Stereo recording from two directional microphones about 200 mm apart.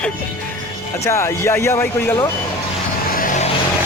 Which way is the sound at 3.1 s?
40° left (ahead or behind).